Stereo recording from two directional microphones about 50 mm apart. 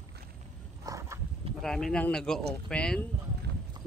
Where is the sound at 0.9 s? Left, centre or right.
Right.